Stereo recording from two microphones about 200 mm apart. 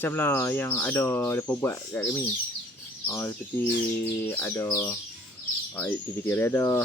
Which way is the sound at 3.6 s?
45° left (ahead or behind).